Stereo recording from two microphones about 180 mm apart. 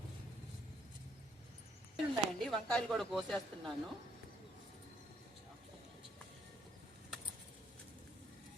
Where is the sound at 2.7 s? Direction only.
Centre (ahead or behind).